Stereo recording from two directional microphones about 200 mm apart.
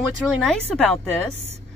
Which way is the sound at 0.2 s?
5° left (ahead or behind).